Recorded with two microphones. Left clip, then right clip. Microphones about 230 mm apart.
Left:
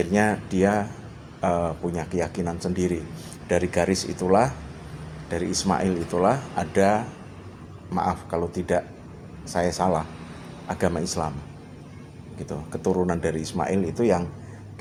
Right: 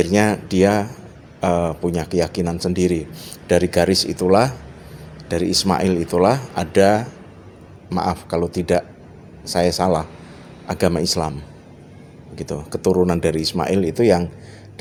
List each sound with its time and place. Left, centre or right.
0.0 s speech: right
12.4 s speech: right